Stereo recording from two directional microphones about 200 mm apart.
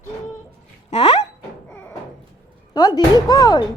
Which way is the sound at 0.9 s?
30° left (ahead or behind).